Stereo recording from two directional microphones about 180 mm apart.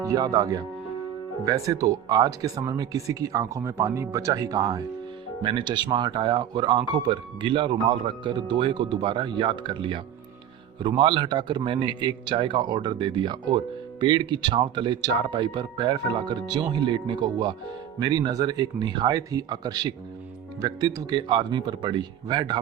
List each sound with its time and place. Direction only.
0.0 s speech: 20° right (ahead or behind)